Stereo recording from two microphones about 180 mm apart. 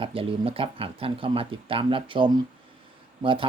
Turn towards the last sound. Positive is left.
turn(degrees=-30)  # may be behind; listen again after turning